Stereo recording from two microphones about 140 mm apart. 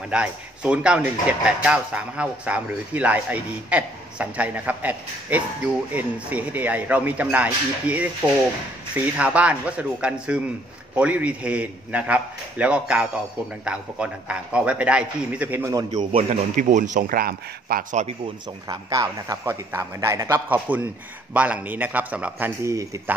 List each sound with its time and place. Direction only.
0.1 s a man's voice: 10° right (ahead or behind)
16.1 s a man's voice: 40° right (ahead or behind)
16.5 s a man's voice: 65° right (ahead or behind); by 18.0 s 90° right
18.7 s speech: 25° right (ahead or behind)
22.6 s speech: 20° right (ahead or behind)